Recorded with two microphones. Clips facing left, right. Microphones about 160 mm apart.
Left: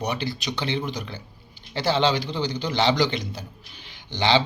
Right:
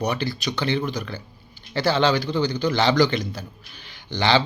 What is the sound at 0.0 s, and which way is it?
A man's voice, 20° left (ahead or behind).